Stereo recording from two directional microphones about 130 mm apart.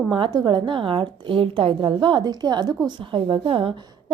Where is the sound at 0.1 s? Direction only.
35° right (ahead or behind).